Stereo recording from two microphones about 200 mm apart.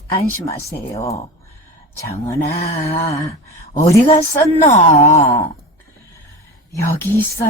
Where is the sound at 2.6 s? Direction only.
30° left (ahead or behind).